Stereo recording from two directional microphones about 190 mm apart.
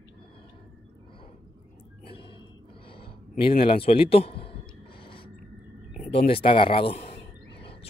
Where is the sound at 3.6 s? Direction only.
30° left (ahead or behind).